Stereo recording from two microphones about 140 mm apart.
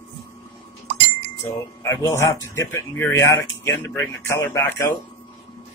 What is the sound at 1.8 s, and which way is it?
Speech, 20° left (ahead or behind).